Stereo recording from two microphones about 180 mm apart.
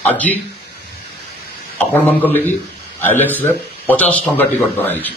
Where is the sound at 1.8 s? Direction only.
10° left (ahead or behind).